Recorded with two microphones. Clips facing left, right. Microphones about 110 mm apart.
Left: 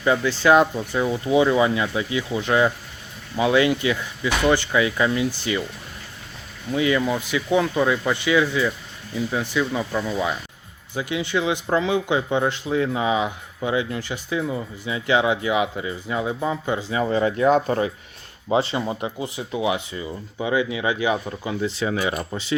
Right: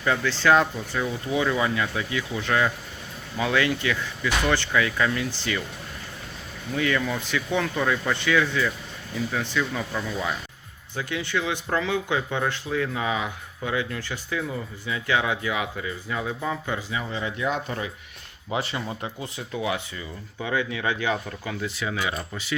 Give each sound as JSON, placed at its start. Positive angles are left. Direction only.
{"t": 0.0, "sound": "speech", "side_deg": 15}
{"t": 6.7, "sound": "speech", "side_deg": 15}
{"t": 16.9, "sound": "speech", "side_deg": 45}
{"t": 18.4, "sound": "speech", "side_deg": 25}
{"t": 21.2, "sound": "speech", "side_deg": 25}